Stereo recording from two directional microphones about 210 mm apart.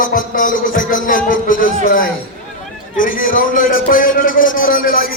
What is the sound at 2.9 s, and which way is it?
A man's voice, 40° left (ahead or behind).